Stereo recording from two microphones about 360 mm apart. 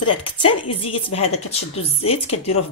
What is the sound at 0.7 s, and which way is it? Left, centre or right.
A woman's voice, centre.